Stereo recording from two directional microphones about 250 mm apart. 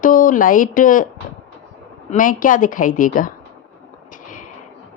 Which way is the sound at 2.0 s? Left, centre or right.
Left.